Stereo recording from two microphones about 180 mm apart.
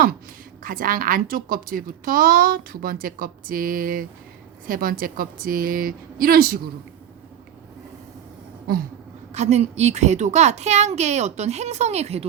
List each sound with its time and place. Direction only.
0.6 s a woman's voice: 50° right (ahead or behind)
9.3 s a child's voice: 40° right (ahead or behind)